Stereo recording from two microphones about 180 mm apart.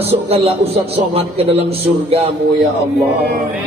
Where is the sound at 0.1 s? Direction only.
35° right (ahead or behind).